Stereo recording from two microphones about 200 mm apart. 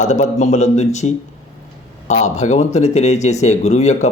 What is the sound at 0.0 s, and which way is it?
Speech, 35° left (ahead or behind).